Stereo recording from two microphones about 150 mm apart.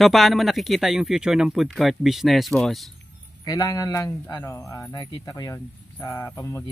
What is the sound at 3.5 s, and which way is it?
Speech, 20° left (ahead or behind).